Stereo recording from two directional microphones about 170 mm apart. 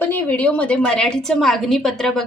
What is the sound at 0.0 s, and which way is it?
A woman's voice, 10° left (ahead or behind).